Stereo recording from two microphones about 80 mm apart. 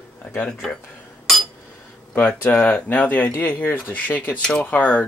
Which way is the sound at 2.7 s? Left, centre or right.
Left.